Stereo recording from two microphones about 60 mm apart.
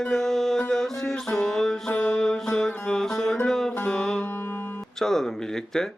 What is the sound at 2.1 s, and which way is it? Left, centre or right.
Music, centre.